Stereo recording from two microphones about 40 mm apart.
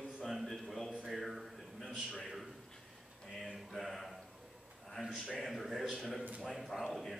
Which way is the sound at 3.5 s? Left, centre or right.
Centre.